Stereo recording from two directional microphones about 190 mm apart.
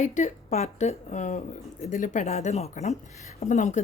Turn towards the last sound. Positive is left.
turn(degrees=40)  # may be behind; listen again after turning